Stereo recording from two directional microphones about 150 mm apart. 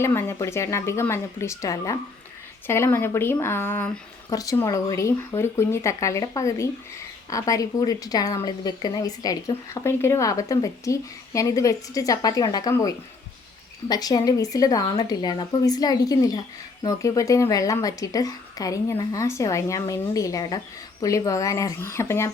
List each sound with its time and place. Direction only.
0.0 s a woman's voice: 15° left (ahead or behind)
4.3 s a woman's voice: 25° left (ahead or behind)